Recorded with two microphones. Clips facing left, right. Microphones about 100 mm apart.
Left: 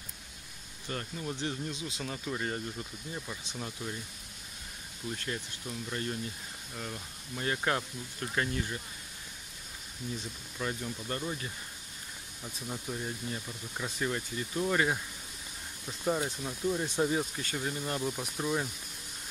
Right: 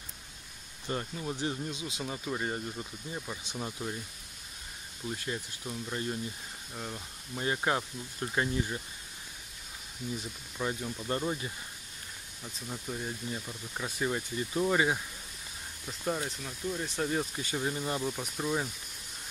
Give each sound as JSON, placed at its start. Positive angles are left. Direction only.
{"t": 1.1, "sound": "speech", "side_deg": -10}
{"t": 5.1, "sound": "speech", "side_deg": -10}
{"t": 10.6, "sound": "speech", "side_deg": -10}
{"t": 11.1, "sound": "speech", "side_deg": -25}
{"t": 12.6, "sound": "speech", "side_deg": 5}
{"t": 15.9, "sound": "speech", "side_deg": 5}
{"t": 17.4, "sound": "speech", "side_deg": -15}
{"t": 18.0, "sound": "speech", "side_deg": 0}